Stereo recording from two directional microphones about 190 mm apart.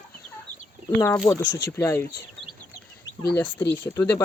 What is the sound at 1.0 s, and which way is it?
Speech, 15° left (ahead or behind).